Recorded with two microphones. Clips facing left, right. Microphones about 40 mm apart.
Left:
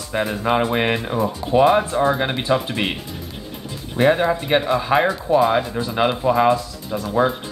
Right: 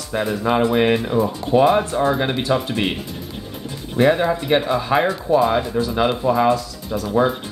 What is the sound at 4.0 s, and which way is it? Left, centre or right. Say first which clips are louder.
Speech: even; centre.